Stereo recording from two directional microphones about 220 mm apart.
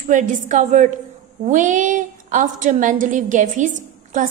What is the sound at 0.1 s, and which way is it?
A woman's voice, 35° right (ahead or behind).